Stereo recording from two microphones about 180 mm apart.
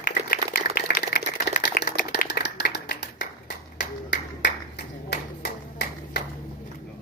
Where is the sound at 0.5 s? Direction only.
50° left (ahead or behind).